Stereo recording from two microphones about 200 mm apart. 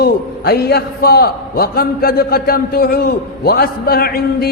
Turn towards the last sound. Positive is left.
turn(degrees=50)  # may be behind; listen again after turning